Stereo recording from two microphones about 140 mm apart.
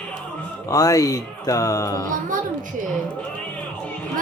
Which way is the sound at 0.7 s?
25° left (ahead or behind).